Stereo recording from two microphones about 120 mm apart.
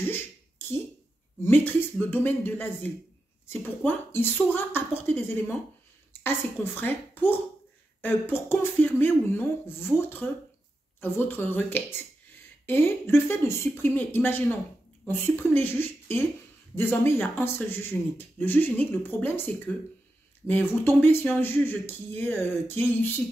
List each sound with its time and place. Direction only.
1.4 s speech: 15° left (ahead or behind)